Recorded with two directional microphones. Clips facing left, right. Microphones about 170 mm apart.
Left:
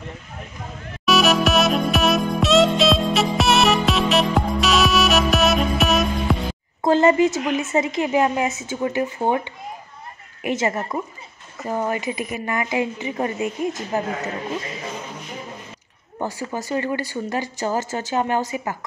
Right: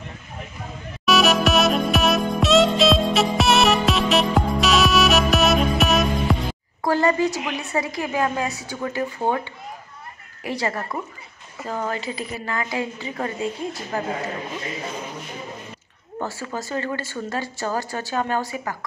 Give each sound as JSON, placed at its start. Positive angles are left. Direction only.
{"t": 1.0, "sound": "music", "side_deg": 0}
{"t": 6.8, "sound": "speech", "side_deg": 20}
{"t": 16.2, "sound": "speech", "side_deg": 15}